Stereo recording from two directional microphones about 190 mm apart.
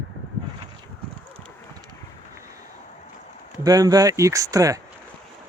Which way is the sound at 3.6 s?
20° right (ahead or behind).